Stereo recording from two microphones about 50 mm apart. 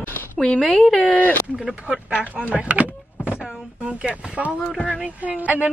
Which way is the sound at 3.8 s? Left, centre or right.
Centre.